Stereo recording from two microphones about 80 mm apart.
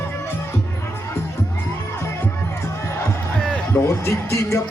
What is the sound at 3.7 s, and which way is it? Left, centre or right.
Speech, left.